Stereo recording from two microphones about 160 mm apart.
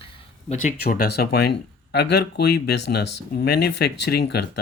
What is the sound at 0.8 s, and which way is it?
Speech, 70° left (ahead or behind).